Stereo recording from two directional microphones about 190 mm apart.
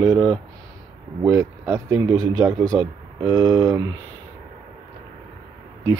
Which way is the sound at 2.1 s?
90° right.